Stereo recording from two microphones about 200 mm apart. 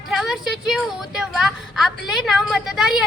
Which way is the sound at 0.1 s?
Centre (ahead or behind).